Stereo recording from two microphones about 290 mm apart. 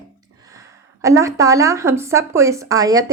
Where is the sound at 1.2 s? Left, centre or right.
Centre.